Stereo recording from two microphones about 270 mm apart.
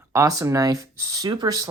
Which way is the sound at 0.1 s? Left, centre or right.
Centre.